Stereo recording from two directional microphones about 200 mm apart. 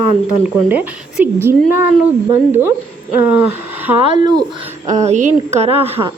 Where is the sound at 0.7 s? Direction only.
10° right (ahead or behind).